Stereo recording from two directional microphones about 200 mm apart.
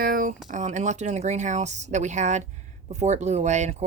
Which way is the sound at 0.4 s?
40° right (ahead or behind).